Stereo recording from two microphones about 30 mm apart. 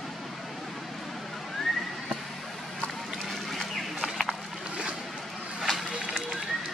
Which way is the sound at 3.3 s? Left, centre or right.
Centre.